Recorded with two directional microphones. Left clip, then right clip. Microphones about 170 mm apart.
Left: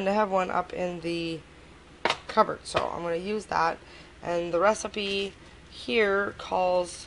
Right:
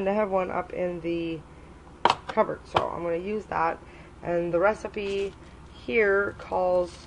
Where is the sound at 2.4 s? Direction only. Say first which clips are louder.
Even; 25° left (ahead or behind).